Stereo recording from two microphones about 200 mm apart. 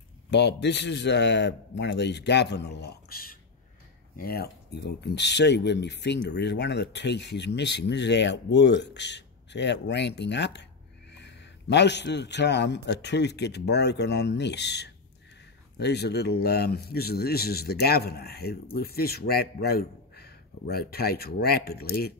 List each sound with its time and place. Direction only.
0.3 s speech: 60° left (ahead or behind)